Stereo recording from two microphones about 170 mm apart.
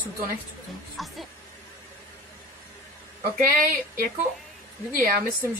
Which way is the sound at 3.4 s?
60° right (ahead or behind).